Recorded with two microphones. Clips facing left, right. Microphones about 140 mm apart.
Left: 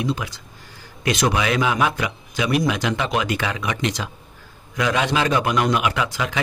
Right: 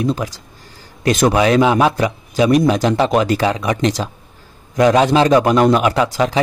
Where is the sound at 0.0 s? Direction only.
40° right (ahead or behind).